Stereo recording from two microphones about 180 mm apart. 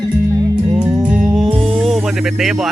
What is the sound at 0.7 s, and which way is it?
Music, 5° right (ahead or behind).